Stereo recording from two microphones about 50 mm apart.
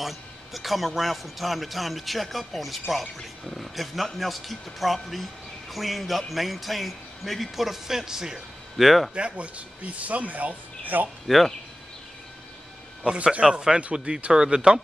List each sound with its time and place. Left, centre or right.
0.0 s speech: centre
9.1 s speech: right
11.2 s speech: centre
13.0 s speech: centre